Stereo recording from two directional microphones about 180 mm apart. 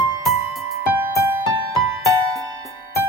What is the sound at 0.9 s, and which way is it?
Music, 15° right (ahead or behind).